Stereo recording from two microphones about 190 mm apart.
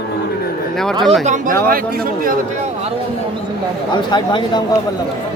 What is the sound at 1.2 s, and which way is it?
Speech, 45° right (ahead or behind).